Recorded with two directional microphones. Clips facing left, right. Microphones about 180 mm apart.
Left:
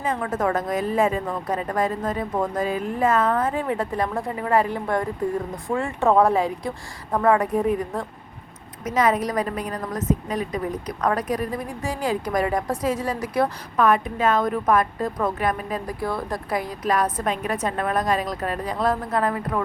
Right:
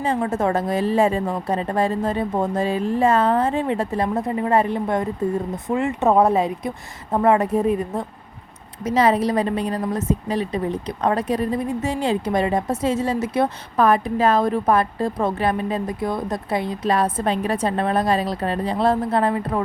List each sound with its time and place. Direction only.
0.0 s a woman's voice: 30° right (ahead or behind)